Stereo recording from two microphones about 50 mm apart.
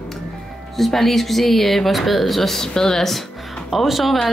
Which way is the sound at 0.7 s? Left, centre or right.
Centre.